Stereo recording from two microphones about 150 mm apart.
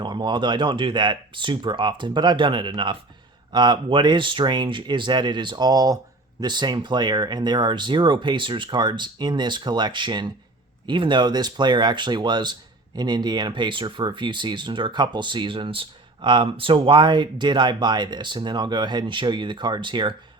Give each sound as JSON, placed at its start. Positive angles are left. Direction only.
{"t": 0.0, "sound": "speech", "side_deg": -30}